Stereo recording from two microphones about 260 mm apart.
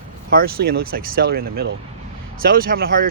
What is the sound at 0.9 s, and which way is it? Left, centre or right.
Speech, right.